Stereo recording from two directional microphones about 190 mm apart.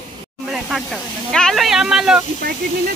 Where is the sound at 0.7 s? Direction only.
Centre (ahead or behind).